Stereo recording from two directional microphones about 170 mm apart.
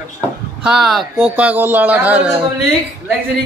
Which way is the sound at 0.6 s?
Centre (ahead or behind).